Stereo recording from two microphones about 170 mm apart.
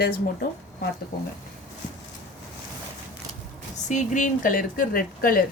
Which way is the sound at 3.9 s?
45° left (ahead or behind).